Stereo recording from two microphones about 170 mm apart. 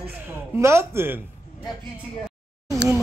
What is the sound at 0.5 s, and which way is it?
Speech, 15° right (ahead or behind).